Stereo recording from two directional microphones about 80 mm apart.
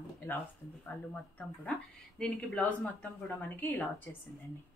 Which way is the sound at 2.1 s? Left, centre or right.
Centre.